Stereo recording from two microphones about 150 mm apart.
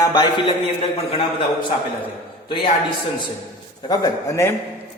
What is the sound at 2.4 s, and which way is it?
Speech, 35° left (ahead or behind).